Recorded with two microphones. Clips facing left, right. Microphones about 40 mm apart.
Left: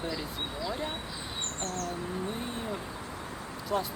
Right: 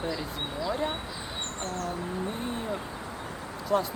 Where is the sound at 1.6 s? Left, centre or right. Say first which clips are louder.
Right 2 dB; right.